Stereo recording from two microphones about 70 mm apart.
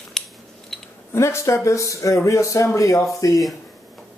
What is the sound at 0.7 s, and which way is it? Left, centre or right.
Clicking, centre.